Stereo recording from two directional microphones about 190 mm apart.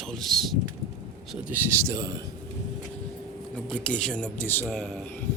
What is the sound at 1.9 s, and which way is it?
Speech, 20° right (ahead or behind).